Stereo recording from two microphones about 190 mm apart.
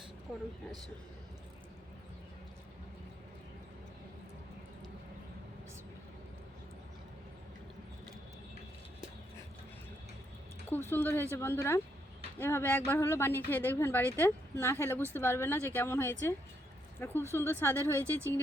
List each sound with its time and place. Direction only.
0.3 s speech: 5° right (ahead or behind)
10.8 s speech: 10° left (ahead or behind)
18.0 s speech: 15° right (ahead or behind)